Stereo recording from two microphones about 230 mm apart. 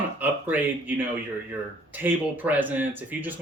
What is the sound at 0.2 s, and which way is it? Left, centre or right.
A man's voice, centre.